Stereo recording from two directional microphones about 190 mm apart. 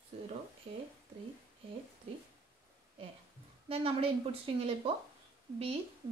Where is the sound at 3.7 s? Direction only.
30° right (ahead or behind).